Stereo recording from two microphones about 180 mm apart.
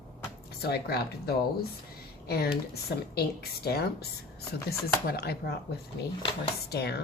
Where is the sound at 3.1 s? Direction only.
60° left (ahead or behind).